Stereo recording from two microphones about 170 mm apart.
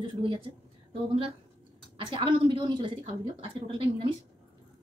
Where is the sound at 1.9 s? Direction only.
30° right (ahead or behind).